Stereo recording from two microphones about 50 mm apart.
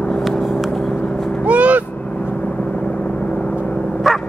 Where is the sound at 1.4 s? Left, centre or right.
Right.